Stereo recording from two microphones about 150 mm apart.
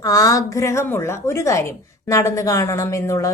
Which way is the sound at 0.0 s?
25° left (ahead or behind).